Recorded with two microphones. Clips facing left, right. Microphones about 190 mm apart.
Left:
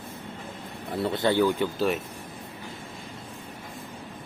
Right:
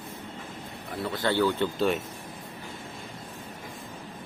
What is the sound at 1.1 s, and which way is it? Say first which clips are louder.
Speech: left 2 dB; 20° left (ahead or behind).